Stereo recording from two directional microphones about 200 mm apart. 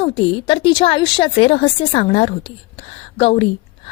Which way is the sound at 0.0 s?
25° left (ahead or behind).